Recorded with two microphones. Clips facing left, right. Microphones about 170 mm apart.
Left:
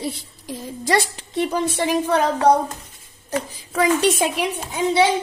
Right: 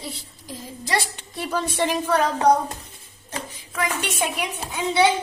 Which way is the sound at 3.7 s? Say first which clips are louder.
Left 9 dB; 35° left (ahead or behind).